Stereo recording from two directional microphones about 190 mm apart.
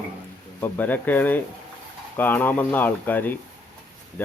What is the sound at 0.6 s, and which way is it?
Speech, 10° left (ahead or behind).